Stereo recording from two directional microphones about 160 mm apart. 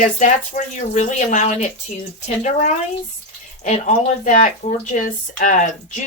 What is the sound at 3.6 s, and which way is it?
A woman's voice, 45° left (ahead or behind).